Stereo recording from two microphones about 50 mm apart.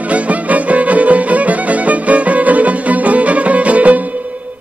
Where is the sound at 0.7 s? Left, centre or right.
Right.